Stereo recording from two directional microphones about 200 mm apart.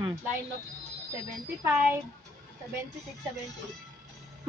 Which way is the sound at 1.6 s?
10° right (ahead or behind).